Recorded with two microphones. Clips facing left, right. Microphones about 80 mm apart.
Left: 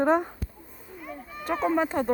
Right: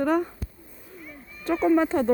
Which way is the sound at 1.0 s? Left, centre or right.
Left.